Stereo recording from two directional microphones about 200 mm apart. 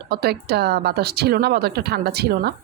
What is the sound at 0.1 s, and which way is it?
A woman's voice, 50° right (ahead or behind).